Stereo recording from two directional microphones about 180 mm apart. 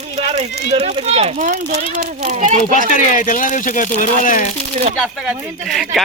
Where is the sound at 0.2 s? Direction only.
35° right (ahead or behind).